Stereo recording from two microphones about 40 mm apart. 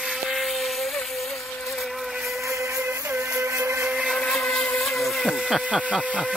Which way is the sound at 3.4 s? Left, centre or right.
Right.